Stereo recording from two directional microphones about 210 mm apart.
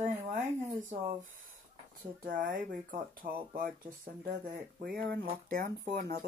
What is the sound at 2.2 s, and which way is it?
Speech, 40° right (ahead or behind).